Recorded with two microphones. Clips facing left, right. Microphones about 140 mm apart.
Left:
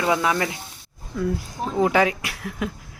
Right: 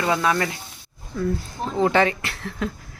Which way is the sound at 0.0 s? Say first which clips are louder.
Even; 15° left (ahead or behind).